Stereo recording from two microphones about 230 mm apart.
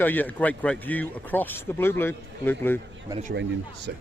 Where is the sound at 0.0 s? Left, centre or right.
Centre.